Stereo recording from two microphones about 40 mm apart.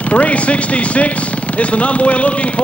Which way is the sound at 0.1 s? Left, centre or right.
Left.